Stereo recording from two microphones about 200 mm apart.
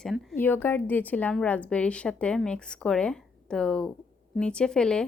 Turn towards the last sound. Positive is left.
turn(degrees=5)  # may be behind; listen again after turning